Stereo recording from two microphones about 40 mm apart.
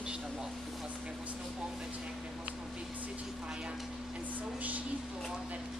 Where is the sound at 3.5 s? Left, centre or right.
Right.